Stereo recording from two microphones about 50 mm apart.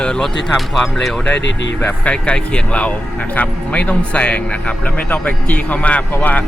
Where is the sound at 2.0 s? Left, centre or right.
Left.